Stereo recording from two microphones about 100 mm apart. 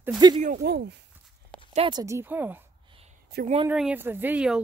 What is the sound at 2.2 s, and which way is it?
Speech, 20° right (ahead or behind).